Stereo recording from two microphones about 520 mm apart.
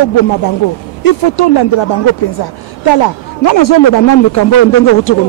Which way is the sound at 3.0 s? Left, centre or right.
Left.